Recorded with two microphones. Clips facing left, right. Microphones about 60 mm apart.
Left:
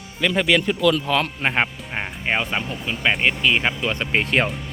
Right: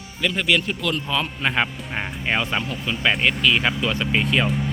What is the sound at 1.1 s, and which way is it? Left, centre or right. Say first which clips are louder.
Speech: left 3 dB; left.